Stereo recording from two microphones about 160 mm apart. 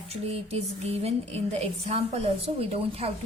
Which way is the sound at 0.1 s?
40° right (ahead or behind).